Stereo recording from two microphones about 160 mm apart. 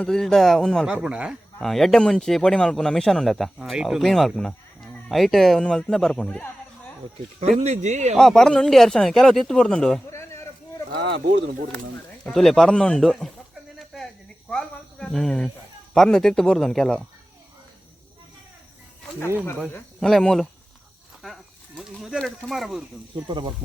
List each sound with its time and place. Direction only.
0.0 s speech: 5° left (ahead or behind)
7.3 s speech: 40° right (ahead or behind)
8.1 s speech: centre (ahead or behind)
10.1 s a sound: 15° left (ahead or behind)
12.2 s speech: centre (ahead or behind)
13.7 s a sound: centre (ahead or behind)
14.5 s snake: 5° left (ahead or behind)
16.0 s speech: 5° left (ahead or behind)
20.0 s speech: centre (ahead or behind)
23.2 s speech: 25° right (ahead or behind)